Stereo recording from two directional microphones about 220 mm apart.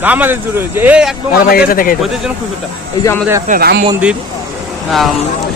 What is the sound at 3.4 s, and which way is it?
Speech, 40° right (ahead or behind).